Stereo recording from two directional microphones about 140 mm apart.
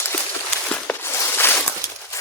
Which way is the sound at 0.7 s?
15° left (ahead or behind).